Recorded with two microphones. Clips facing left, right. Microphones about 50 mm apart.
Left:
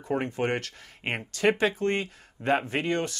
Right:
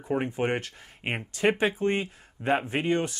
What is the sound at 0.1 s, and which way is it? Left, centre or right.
Speech, centre.